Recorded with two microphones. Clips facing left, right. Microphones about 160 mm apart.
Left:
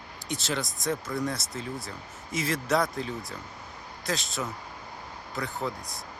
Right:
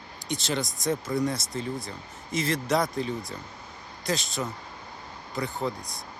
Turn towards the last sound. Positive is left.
turn(degrees=5)  # may be behind; listen again after turning